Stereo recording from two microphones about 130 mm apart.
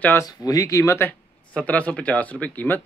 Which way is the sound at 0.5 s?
25° left (ahead or behind).